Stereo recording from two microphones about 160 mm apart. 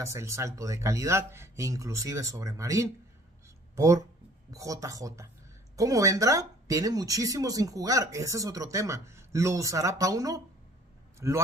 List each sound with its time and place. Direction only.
0.0 s speech: 20° right (ahead or behind)